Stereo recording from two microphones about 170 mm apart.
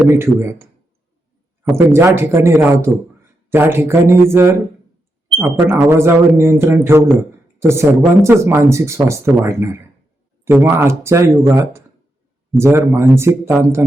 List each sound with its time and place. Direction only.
0.1 s speech: 15° right (ahead or behind)